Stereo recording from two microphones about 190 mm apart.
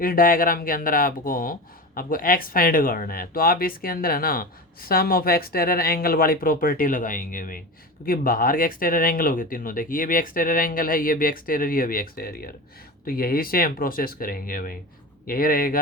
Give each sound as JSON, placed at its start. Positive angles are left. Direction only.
{"t": 0.0, "sound": "speech", "side_deg": 50}